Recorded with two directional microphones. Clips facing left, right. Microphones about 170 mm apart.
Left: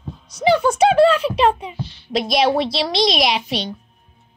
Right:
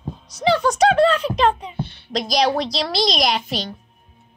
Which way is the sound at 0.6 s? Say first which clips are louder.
Left 2 dB; 5° left (ahead or behind).